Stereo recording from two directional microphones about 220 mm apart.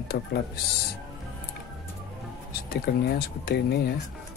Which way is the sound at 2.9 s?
45° left (ahead or behind).